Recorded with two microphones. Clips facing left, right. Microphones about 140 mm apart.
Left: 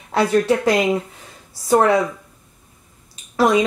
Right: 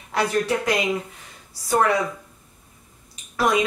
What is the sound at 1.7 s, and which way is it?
Speech, 25° left (ahead or behind).